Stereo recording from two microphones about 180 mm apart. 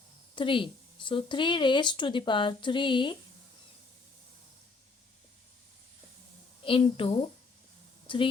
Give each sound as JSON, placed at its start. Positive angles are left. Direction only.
{"t": 0.3, "sound": "speech", "side_deg": 30}
{"t": 6.6, "sound": "a woman's voice", "side_deg": 30}
{"t": 8.0, "sound": "a sound", "side_deg": 30}